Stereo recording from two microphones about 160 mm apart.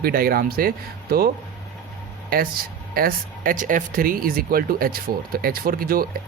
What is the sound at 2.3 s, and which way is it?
Speech, 65° right (ahead or behind).